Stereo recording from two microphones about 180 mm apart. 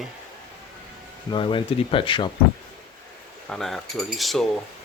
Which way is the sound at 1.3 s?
25° left (ahead or behind).